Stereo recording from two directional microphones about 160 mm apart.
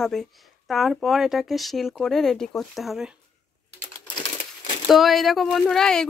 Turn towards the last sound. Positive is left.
turn(degrees=5)  # may be behind; listen again after turning